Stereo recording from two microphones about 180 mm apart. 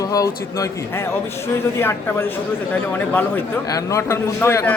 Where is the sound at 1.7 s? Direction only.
15° left (ahead or behind).